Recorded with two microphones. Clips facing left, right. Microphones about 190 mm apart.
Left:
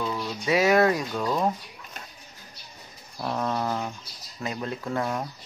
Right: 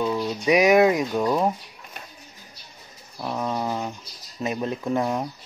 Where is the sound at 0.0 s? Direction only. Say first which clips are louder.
Right 6 dB; 20° right (ahead or behind).